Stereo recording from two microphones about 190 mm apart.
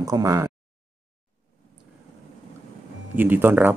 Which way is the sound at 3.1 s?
10° right (ahead or behind).